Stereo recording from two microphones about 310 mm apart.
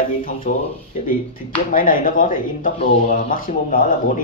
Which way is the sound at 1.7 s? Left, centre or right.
Left.